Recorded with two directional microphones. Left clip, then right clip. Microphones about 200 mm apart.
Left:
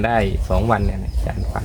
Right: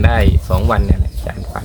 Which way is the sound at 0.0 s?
5° right (ahead or behind).